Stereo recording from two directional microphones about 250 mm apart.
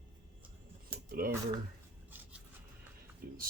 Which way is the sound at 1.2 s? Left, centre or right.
Right.